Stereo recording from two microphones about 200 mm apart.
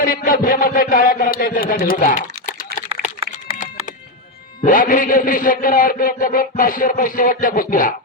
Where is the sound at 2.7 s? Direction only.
55° right (ahead or behind).